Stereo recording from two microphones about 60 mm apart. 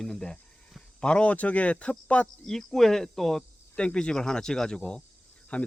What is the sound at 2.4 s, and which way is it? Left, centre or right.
Speech, centre.